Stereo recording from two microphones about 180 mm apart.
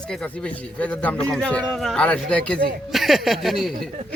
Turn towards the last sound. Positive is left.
turn(degrees=0)  # may be behind; listen again after turning